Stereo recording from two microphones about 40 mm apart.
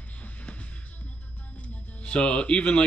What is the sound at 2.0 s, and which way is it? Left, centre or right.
Speech, left.